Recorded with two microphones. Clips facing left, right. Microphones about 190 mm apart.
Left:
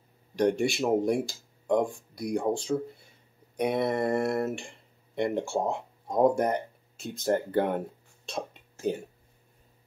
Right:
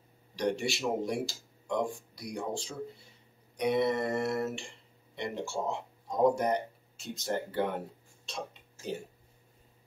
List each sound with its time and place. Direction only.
0.4 s speech: 55° left (ahead or behind)